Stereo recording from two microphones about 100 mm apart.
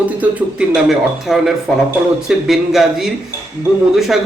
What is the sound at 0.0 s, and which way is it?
Speech, 15° right (ahead or behind).